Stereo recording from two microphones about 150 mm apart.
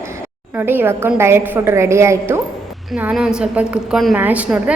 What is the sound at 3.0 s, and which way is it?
A woman's voice, 5° right (ahead or behind).